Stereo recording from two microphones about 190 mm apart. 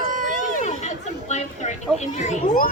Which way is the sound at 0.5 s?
40° left (ahead or behind).